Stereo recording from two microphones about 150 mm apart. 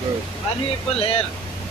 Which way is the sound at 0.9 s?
40° left (ahead or behind).